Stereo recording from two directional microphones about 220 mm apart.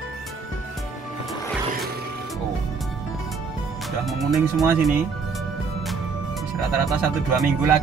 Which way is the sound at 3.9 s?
Centre (ahead or behind).